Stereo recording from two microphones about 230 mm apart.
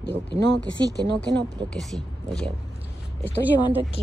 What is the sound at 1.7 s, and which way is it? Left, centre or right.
Speech, centre.